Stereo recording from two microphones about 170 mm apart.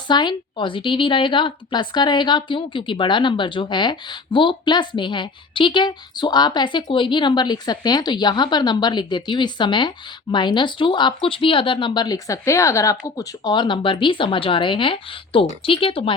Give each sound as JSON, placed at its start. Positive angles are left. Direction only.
{"t": 0.1, "sound": "a woman's voice", "side_deg": 25}